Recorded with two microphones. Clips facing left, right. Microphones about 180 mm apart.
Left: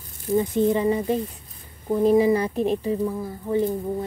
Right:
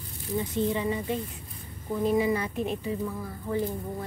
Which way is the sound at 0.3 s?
45° left (ahead or behind).